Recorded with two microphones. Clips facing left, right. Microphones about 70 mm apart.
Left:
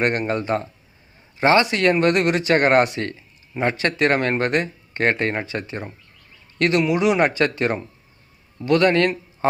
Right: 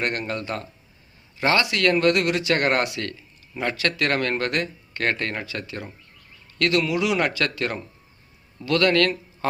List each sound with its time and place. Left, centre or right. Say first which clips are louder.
0.0 s a man's voice: left 6 dB; left